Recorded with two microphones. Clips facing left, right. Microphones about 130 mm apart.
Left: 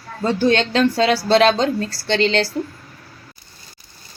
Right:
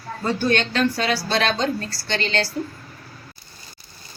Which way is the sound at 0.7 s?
90° left.